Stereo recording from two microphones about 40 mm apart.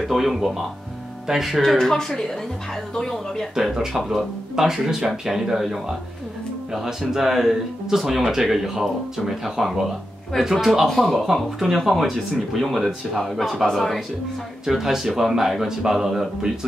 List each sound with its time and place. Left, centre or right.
0.1 s speech: centre
1.6 s speech: centre
3.5 s speech: centre
14.7 s speech: centre